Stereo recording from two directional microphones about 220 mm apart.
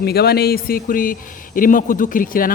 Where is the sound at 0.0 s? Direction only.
45° left (ahead or behind).